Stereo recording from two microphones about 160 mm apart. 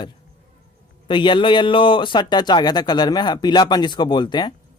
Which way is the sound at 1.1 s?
30° left (ahead or behind).